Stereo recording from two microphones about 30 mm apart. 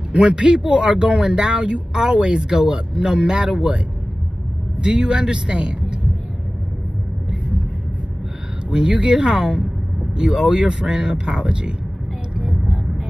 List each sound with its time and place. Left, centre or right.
0.1 s speech: right
4.8 s speech: right
8.6 s speech: right